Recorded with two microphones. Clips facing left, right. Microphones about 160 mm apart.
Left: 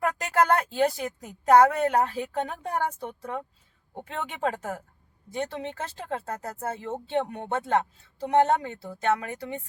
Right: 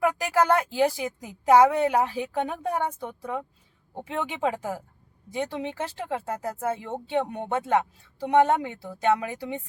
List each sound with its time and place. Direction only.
0.0 s a woman's voice: 10° right (ahead or behind)
4.3 s a woman's voice: 15° right (ahead or behind)